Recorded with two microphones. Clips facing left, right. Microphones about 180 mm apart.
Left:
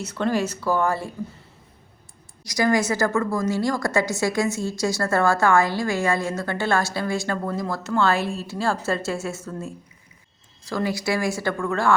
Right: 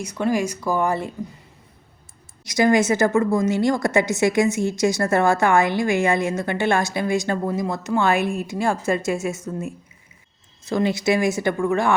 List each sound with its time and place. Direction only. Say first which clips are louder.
0.0 s speech: right 2 dB; 10° right (ahead or behind)
2.4 s a woman's voice: right 4 dB; 25° right (ahead or behind)